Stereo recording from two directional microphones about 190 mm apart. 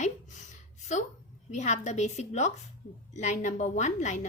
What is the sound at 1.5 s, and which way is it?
A woman's voice, 40° left (ahead or behind).